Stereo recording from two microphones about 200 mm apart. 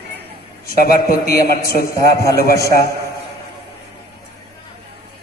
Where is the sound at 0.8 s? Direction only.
50° left (ahead or behind).